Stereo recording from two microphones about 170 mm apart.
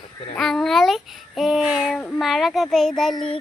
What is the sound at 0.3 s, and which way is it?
A child's voice, centre (ahead or behind).